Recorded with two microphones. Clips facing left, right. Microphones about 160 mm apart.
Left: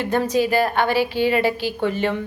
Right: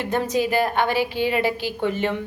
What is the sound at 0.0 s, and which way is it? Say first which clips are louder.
A woman's voice: left 3 dB; 20° right (ahead or behind).